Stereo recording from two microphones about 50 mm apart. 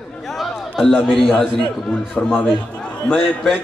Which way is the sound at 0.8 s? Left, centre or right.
Centre.